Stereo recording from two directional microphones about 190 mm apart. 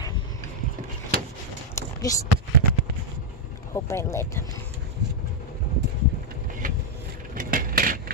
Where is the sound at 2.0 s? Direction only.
20° left (ahead or behind).